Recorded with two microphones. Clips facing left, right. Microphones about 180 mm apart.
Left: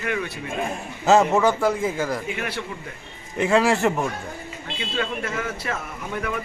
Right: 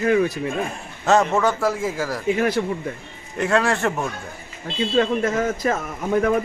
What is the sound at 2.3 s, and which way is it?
Speech, 40° right (ahead or behind).